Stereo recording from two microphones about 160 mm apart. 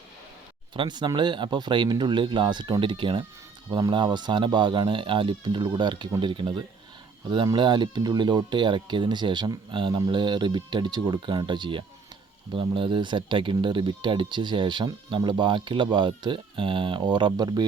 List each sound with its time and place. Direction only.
0.7 s speech: 30° right (ahead or behind)